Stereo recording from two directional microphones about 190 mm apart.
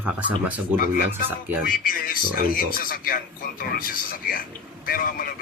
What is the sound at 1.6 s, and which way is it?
A man's voice, 50° left (ahead or behind).